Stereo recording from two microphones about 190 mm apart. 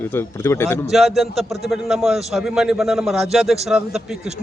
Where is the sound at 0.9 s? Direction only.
Centre (ahead or behind).